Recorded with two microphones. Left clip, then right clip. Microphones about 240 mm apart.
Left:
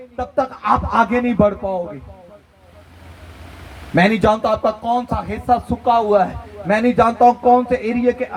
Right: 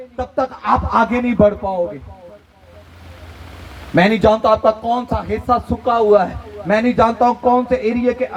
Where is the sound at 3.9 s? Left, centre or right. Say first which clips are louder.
Right 2 dB; left.